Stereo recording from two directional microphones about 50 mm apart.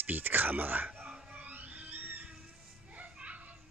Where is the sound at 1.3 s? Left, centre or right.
Right.